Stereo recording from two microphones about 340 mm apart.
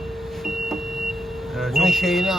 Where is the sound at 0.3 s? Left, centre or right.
Centre.